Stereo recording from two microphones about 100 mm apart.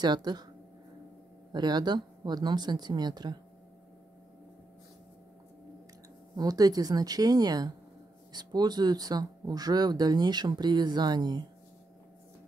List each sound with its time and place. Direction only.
0.0 s speech: 45° right (ahead or behind)
1.5 s speech: 45° right (ahead or behind)
6.3 s a woman's voice: 40° right (ahead or behind)